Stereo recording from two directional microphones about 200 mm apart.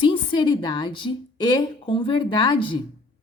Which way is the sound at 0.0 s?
25° left (ahead or behind).